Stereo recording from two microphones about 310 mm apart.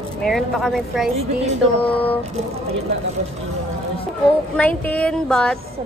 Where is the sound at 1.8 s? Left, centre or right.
Centre.